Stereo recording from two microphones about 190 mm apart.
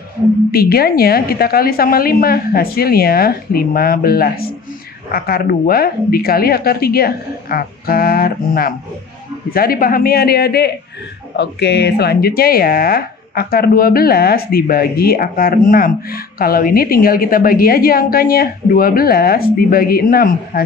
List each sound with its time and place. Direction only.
0.5 s speech: 50° left (ahead or behind)